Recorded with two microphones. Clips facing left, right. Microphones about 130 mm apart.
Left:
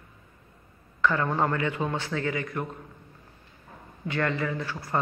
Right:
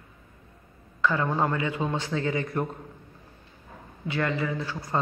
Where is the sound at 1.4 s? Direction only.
20° right (ahead or behind).